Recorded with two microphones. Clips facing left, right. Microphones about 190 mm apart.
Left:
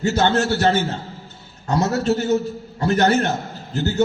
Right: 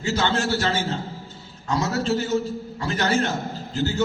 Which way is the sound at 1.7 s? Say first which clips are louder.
Left 4 dB; 60° left (ahead or behind).